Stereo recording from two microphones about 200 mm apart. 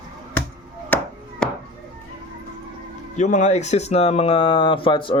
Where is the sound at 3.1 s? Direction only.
35° left (ahead or behind).